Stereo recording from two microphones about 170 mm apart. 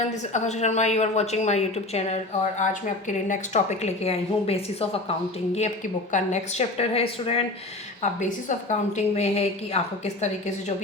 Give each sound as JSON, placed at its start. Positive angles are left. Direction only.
{"t": 0.3, "sound": "a woman's voice", "side_deg": 40}